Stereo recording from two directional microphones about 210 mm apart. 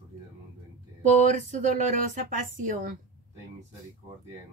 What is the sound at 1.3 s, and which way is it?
Speech, 35° right (ahead or behind).